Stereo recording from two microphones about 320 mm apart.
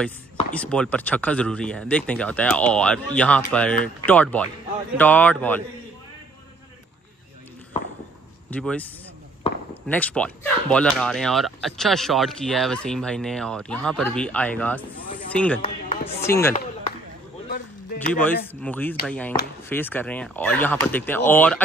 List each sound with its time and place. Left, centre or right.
0.0 s speech: centre
8.5 s speech: centre
15.6 s chopping: centre
16.3 s speech: centre
18.5 s speech: centre